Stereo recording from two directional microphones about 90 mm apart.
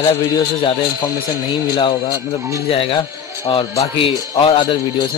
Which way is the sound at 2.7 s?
80° left.